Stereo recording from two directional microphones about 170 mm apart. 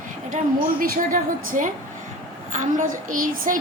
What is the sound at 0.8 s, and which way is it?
A woman's voice, 55° right (ahead or behind).